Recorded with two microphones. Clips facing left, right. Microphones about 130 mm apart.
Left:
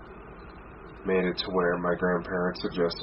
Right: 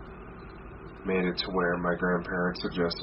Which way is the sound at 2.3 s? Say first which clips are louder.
Left 2 dB; 30° left (ahead or behind).